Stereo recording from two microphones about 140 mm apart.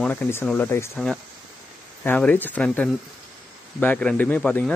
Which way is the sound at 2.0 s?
10° left (ahead or behind).